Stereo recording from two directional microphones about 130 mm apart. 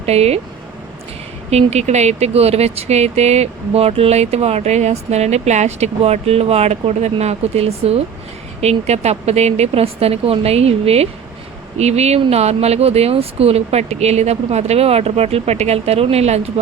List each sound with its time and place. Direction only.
0.0 s speech: 55° right (ahead or behind)
1.5 s speech: 55° right (ahead or behind)